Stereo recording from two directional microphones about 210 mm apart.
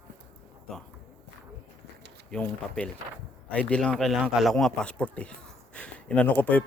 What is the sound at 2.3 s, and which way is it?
Speech, 5° left (ahead or behind).